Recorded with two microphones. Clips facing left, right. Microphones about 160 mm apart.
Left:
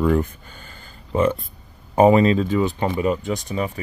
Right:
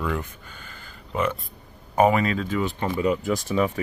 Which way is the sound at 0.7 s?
30° left (ahead or behind).